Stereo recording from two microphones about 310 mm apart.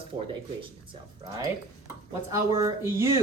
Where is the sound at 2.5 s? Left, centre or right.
Centre.